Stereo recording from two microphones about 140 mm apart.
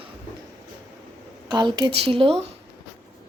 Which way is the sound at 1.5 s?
30° right (ahead or behind).